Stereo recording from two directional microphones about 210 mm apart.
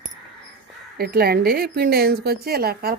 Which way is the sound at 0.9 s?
50° right (ahead or behind).